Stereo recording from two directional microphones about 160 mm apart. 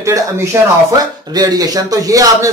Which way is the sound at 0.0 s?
15° right (ahead or behind).